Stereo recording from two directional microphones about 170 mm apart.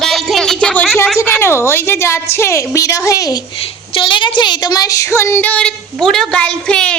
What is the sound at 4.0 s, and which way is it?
Speech, 30° left (ahead or behind).